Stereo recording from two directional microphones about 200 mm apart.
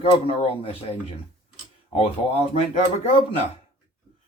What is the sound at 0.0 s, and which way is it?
Speech, 25° left (ahead or behind).